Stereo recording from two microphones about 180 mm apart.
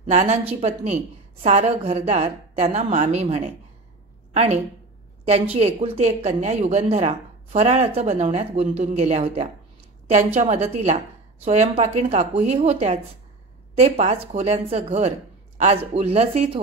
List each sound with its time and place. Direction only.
0.0 s a woman's voice: 45° right (ahead or behind)